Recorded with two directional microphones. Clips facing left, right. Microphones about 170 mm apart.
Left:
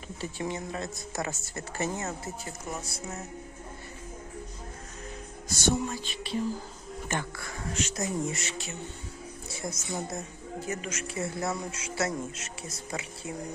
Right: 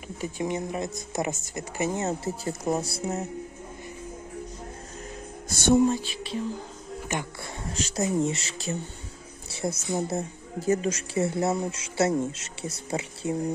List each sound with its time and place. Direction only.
0.2 s speech: 15° right (ahead or behind)
2.0 s speech: 30° right (ahead or behind)
5.5 s speech: 55° right (ahead or behind)
6.0 s speech: 5° right (ahead or behind)
7.3 s speech: 30° right (ahead or behind)